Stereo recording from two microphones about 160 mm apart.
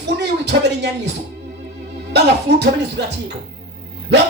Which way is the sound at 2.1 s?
90° right.